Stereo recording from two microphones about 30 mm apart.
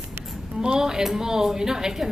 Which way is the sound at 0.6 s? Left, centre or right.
Right.